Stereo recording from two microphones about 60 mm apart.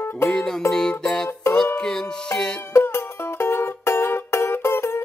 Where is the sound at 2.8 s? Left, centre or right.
Left.